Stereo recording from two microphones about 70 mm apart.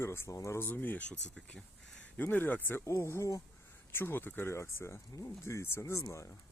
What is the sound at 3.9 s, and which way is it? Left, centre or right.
Speech, left.